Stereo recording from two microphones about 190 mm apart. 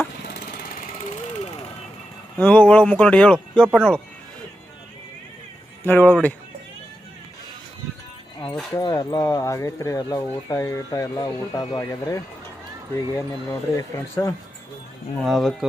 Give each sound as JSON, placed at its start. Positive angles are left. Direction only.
{"t": 0.8, "sound": "jackhammer", "side_deg": 40}
{"t": 2.4, "sound": "speech", "side_deg": 5}
{"t": 5.8, "sound": "speech", "side_deg": 10}
{"t": 8.7, "sound": "speech", "side_deg": 20}
{"t": 15.2, "sound": "speech", "side_deg": 0}